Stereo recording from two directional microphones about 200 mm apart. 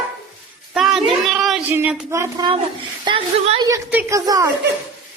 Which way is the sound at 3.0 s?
25° right (ahead or behind).